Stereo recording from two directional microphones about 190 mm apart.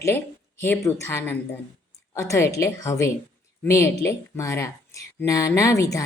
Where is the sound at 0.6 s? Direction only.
10° left (ahead or behind).